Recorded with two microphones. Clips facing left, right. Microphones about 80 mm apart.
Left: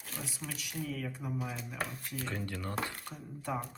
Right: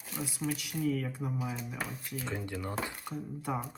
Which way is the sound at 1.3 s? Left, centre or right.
Centre.